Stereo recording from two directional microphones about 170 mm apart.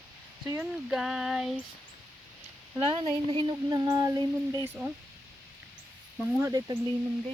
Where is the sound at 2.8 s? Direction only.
30° right (ahead or behind).